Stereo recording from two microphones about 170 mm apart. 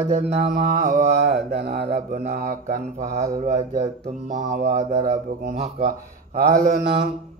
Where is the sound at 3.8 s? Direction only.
45° right (ahead or behind).